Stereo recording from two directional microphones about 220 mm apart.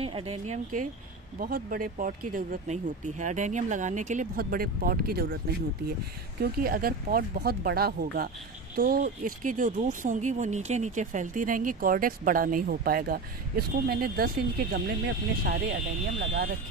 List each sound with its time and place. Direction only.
0.0 s speech: 25° right (ahead or behind)
1.4 s speech: 40° right (ahead or behind)
6.4 s speech: 40° right (ahead or behind)